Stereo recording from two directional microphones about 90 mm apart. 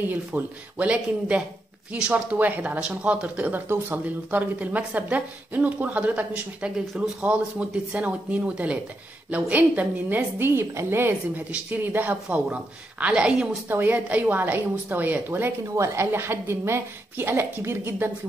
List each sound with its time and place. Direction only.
0.0 s a woman's voice: 20° right (ahead or behind)
13.7 s a woman's voice: 25° right (ahead or behind)
15.7 s a woman's voice: 35° right (ahead or behind)